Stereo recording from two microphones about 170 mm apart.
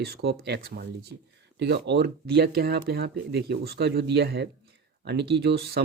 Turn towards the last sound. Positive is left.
turn(degrees=-75)  # may be behind; listen again after turning